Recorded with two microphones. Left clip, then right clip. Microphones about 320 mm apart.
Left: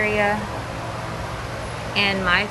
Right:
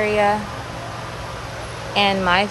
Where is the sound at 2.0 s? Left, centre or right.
Centre.